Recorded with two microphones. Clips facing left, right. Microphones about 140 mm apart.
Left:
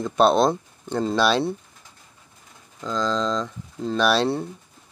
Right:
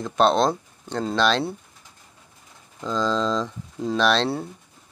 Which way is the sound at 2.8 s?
5° right (ahead or behind).